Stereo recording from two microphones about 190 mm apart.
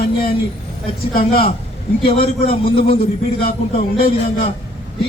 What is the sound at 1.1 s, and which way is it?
Speech, 50° left (ahead or behind).